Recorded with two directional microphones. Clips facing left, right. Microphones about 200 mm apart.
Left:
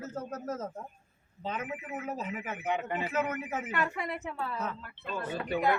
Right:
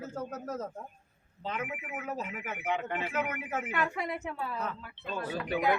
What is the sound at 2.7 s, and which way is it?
Speech, 5° left (ahead or behind).